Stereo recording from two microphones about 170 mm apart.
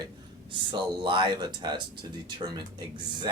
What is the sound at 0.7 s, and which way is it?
Speech, 25° right (ahead or behind).